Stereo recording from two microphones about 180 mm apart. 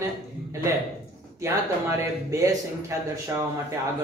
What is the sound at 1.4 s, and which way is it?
Speech, 15° right (ahead or behind).